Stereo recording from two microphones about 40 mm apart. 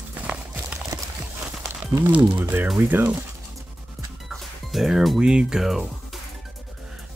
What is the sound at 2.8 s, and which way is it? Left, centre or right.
Speech, right.